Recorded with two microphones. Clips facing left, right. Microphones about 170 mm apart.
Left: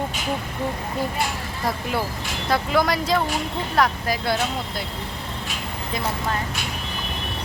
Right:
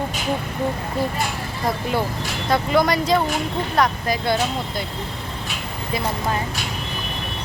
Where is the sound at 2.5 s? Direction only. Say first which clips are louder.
Right 2 dB; centre (ahead or behind).